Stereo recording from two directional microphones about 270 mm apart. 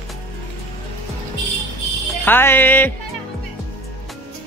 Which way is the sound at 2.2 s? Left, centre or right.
Centre.